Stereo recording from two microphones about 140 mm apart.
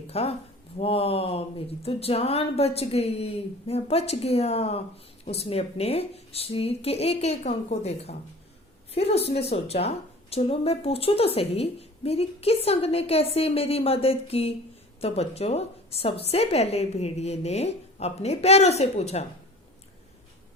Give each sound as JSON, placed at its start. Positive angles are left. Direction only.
{"t": 0.1, "sound": "a woman's voice", "side_deg": 45}